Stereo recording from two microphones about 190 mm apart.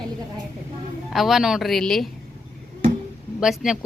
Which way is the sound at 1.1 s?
Centre (ahead or behind).